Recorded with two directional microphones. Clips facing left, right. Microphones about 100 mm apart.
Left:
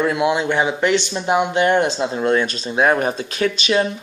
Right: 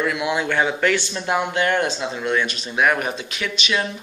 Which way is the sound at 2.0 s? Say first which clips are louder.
Left 5 dB; 35° left (ahead or behind).